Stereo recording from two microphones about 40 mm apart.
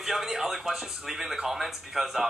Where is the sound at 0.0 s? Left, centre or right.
Centre.